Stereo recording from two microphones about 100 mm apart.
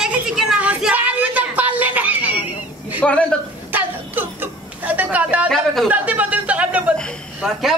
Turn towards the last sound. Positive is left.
turn(degrees=0)  # may be behind; listen again after turning